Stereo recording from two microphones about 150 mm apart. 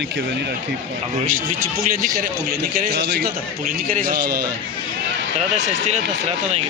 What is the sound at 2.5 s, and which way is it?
A man's voice, 90° right.